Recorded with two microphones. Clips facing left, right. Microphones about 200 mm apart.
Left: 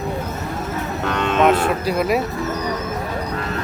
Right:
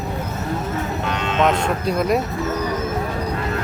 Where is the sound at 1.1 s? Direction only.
55° left (ahead or behind).